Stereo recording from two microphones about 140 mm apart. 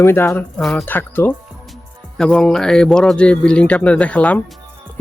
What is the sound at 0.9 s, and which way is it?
A man's voice, 15° left (ahead or behind).